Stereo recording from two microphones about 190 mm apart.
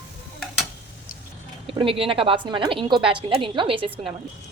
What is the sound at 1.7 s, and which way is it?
A woman's voice, 30° right (ahead or behind).